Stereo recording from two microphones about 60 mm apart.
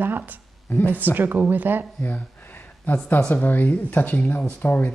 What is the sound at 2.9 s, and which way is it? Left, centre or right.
Speech, left.